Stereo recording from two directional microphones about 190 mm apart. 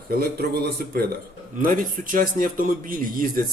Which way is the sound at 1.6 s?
45° right (ahead or behind).